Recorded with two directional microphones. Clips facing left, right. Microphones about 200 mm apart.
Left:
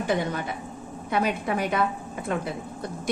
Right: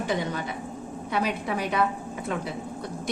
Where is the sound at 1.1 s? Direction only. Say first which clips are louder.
Left 2 dB; 50° left (ahead or behind).